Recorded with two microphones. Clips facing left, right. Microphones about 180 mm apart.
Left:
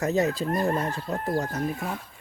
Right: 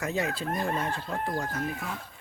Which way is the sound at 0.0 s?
40° left (ahead or behind).